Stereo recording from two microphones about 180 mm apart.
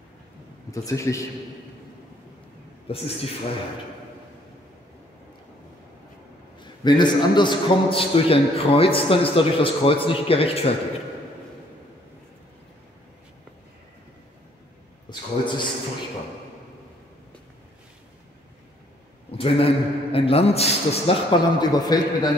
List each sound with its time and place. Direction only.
0.7 s speech: 15° left (ahead or behind)
2.9 s a man's voice: 30° left (ahead or behind)
6.6 s a man's voice: 25° left (ahead or behind)
15.0 s a man's voice: 25° left (ahead or behind)
19.3 s a man's voice: 30° left (ahead or behind)